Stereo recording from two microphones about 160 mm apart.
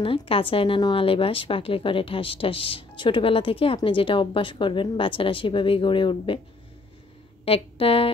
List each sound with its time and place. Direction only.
0.0 s a woman's voice: 35° left (ahead or behind)
7.4 s speech: 35° left (ahead or behind)